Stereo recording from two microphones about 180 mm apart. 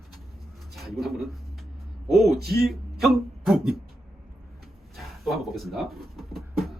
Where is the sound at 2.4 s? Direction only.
60° right (ahead or behind).